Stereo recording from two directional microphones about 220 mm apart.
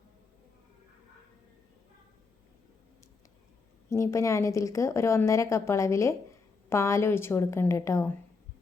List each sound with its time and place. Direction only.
3.8 s a woman's voice: 15° left (ahead or behind)